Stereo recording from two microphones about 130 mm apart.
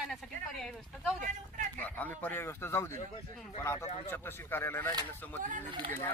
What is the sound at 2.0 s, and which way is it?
A man's voice, 15° left (ahead or behind).